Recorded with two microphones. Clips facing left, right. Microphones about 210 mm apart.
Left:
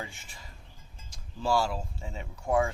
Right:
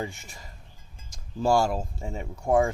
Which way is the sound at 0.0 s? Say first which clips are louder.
Right 7 dB; 45° right (ahead or behind).